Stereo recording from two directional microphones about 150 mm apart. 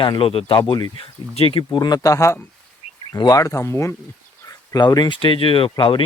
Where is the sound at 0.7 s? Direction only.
30° left (ahead or behind).